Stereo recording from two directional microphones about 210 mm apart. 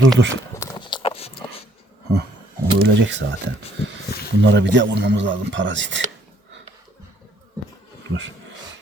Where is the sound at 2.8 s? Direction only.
60° right (ahead or behind).